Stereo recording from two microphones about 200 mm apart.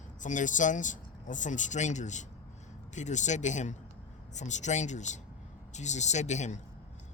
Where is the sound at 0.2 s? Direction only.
40° left (ahead or behind).